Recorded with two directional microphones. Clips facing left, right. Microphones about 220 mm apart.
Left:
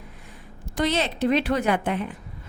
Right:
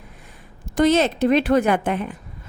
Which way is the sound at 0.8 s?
45° right (ahead or behind).